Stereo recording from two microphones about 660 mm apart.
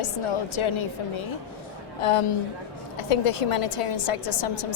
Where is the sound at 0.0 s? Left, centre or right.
Left.